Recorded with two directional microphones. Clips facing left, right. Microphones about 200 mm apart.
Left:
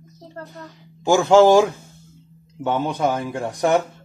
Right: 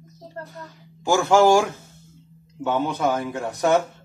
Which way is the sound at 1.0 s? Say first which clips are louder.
Left 4 dB; 20° left (ahead or behind).